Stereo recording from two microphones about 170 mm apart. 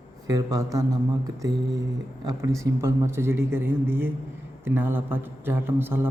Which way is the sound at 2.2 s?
20° right (ahead or behind).